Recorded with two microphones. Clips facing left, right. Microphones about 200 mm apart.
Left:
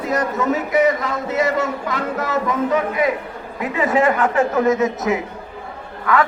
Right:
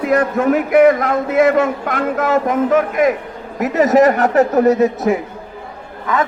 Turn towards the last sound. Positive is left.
turn(degrees=-20)  # may be behind; listen again after turning